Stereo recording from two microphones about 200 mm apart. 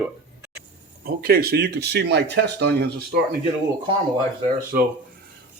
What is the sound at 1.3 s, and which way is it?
Speech, 50° right (ahead or behind).